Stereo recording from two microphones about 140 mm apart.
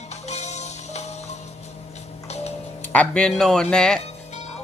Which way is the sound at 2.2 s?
50° left (ahead or behind).